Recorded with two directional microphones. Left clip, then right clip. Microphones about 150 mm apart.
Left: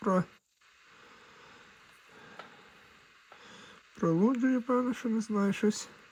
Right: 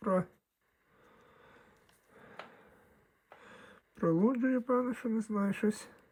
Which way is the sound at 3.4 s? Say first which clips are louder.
Left 3 dB; 10° left (ahead or behind).